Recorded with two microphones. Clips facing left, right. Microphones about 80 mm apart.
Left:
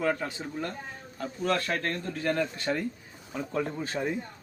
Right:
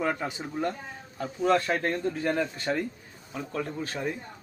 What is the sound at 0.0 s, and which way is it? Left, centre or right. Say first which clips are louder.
A man's voice: even; centre.